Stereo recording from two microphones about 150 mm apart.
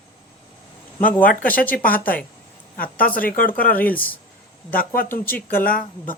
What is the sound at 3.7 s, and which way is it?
Speech, 10° left (ahead or behind).